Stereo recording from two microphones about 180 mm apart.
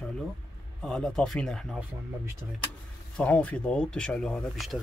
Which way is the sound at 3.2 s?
5° left (ahead or behind).